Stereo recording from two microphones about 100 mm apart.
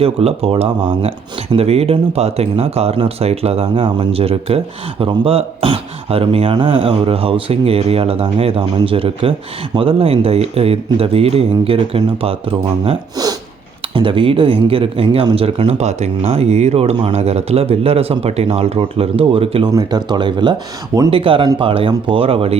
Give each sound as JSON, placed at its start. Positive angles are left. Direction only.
{"t": 0.0, "sound": "speech", "side_deg": -85}
{"t": 20.1, "sound": "speech", "side_deg": -50}
{"t": 21.1, "sound": "speech", "side_deg": -65}